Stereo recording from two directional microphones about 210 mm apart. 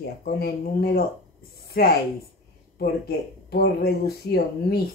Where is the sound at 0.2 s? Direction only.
45° left (ahead or behind).